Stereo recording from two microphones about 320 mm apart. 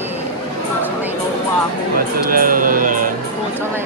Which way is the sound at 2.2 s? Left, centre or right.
Right.